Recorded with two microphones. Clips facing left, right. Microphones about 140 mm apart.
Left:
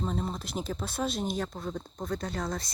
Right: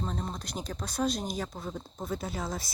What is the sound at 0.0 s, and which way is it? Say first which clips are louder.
Speech: left 3 dB; centre (ahead or behind).